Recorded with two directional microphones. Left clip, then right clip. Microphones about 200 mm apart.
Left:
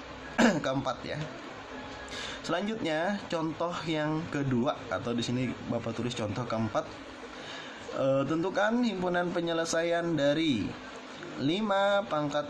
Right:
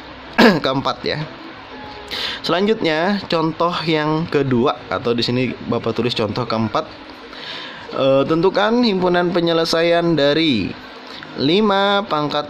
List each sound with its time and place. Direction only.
0.4 s speech: 50° right (ahead or behind)
8.0 s speech: 45° right (ahead or behind)